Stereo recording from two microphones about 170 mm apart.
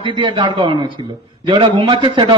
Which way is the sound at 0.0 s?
30° right (ahead or behind).